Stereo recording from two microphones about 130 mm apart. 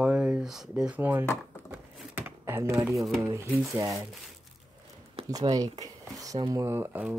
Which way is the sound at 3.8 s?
25° right (ahead or behind).